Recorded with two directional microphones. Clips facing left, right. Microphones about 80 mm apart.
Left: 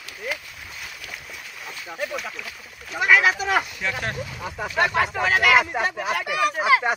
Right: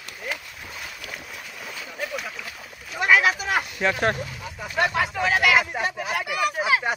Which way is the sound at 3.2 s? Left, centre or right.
Centre.